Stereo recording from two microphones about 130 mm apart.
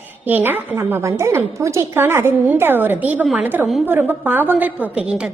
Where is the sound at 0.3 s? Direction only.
15° right (ahead or behind).